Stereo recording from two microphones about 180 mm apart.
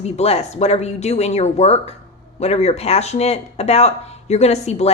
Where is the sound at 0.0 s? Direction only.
35° left (ahead or behind).